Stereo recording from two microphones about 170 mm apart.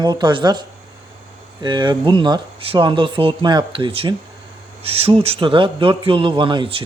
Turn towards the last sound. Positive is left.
turn(degrees=-30)  # may be behind; listen again after turning